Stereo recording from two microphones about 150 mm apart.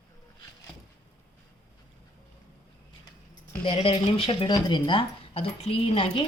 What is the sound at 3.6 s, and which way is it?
Speech, 40° left (ahead or behind).